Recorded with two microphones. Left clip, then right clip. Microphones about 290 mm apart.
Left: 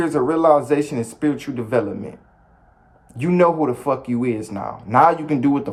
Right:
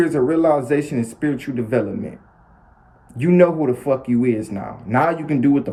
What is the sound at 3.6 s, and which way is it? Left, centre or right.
Speech, left.